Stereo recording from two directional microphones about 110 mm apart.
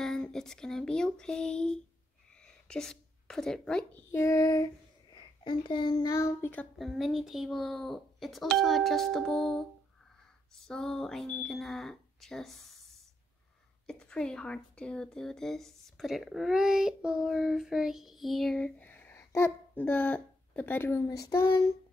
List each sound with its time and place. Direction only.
0.0 s speech: 5° left (ahead or behind)
2.3 s frog: 5° left (ahead or behind)
3.9 s speech: 20° left (ahead or behind)
5.1 s a child's voice: 45° left (ahead or behind); by 6.7 s 20° left (ahead or behind)
6.8 s speech: centre (ahead or behind)
13.8 s speech: 10° left (ahead or behind)
18.8 s a child's voice: 15° left (ahead or behind)